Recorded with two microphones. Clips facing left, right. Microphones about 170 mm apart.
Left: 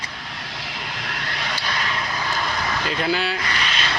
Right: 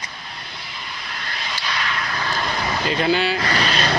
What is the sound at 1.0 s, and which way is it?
Vehicle, 65° left (ahead or behind).